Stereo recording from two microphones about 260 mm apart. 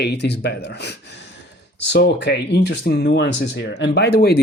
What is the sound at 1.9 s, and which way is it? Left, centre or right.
Speech, left.